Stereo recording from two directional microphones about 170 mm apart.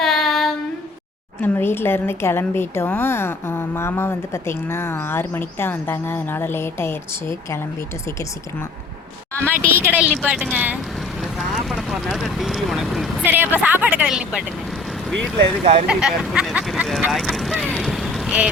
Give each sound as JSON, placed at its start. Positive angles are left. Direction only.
{"t": 0.0, "sound": "child singing", "side_deg": 0}
{"t": 1.4, "sound": "speech", "side_deg": 10}
{"t": 9.6, "sound": "speech", "side_deg": -10}
{"t": 11.2, "sound": "vehicle", "side_deg": 0}
{"t": 13.2, "sound": "speech", "side_deg": -10}
{"t": 15.6, "sound": "speech", "side_deg": -45}
{"t": 15.9, "sound": "speech", "side_deg": -5}